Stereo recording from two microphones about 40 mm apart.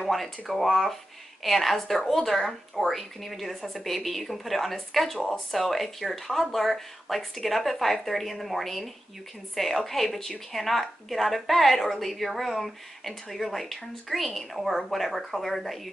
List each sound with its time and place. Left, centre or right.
0.1 s a woman's voice: centre